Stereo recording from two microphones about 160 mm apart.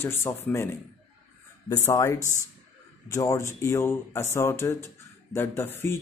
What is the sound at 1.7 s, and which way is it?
Speech, 20° left (ahead or behind).